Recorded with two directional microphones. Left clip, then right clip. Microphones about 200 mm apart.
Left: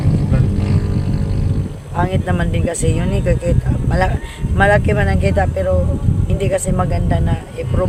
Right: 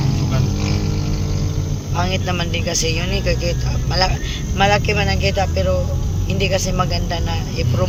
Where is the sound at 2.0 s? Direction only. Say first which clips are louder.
Left 2 dB; 20° left (ahead or behind).